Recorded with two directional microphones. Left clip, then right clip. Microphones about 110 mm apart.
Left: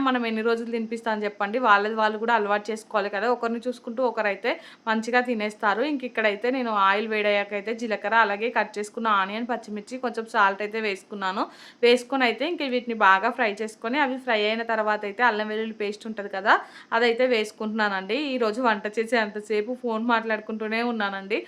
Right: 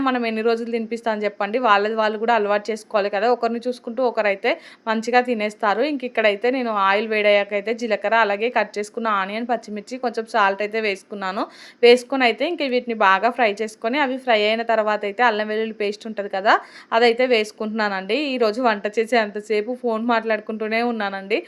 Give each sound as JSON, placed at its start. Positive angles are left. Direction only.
{"t": 0.0, "sound": "a woman's voice", "side_deg": -25}